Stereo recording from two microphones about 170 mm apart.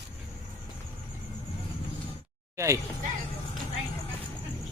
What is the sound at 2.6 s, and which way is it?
Speech, 20° right (ahead or behind).